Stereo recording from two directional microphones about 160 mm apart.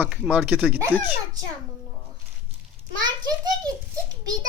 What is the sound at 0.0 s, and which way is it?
Speech, 5° right (ahead or behind).